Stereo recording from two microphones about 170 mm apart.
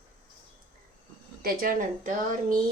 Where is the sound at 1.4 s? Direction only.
60° right (ahead or behind).